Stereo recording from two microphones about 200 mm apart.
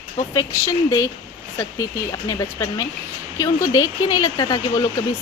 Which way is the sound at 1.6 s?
15° left (ahead or behind).